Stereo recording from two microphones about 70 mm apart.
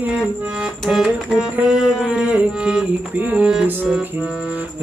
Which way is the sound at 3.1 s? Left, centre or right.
Right.